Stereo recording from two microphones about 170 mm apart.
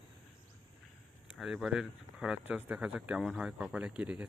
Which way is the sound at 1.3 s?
Centre (ahead or behind).